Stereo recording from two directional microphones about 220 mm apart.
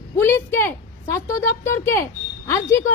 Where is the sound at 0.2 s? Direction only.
10° left (ahead or behind).